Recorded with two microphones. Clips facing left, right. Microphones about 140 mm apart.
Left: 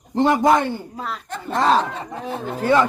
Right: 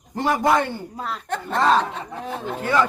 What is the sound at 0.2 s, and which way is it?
Speech, 20° left (ahead or behind).